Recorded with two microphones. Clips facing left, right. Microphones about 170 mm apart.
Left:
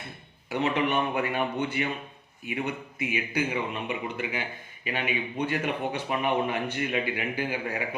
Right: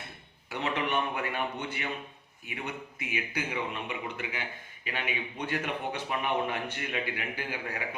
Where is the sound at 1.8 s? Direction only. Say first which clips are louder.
Left 7 dB; 15° left (ahead or behind).